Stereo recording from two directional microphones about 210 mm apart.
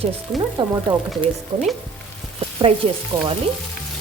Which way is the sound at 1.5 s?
35° right (ahead or behind).